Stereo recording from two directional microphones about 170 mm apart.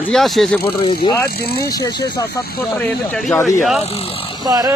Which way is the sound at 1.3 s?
65° left (ahead or behind).